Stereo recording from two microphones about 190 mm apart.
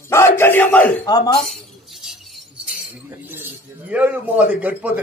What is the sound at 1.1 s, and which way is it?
Speech, 20° left (ahead or behind).